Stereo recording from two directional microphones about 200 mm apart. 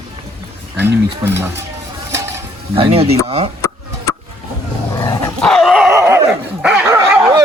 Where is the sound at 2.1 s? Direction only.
15° right (ahead or behind).